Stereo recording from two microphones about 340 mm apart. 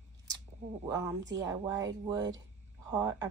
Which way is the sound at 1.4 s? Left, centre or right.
Centre.